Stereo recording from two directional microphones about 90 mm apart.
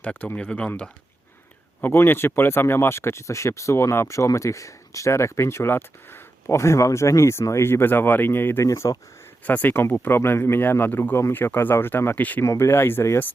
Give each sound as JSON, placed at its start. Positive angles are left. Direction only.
{"t": 0.0, "sound": "speech", "side_deg": 15}
{"t": 1.8, "sound": "speech", "side_deg": 25}
{"t": 8.6, "sound": "speech", "side_deg": 35}
{"t": 9.5, "sound": "speech", "side_deg": 20}
{"t": 12.5, "sound": "speech", "side_deg": 30}